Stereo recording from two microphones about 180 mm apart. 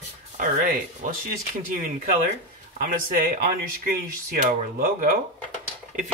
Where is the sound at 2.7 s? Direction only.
50° right (ahead or behind).